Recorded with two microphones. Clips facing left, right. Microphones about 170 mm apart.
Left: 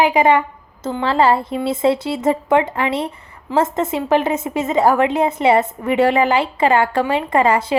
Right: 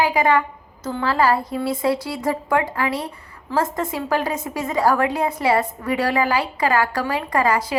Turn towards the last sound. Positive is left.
turn(degrees=25)  # may be behind; listen again after turning